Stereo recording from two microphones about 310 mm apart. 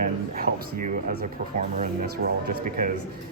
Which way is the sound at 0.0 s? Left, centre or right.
Right.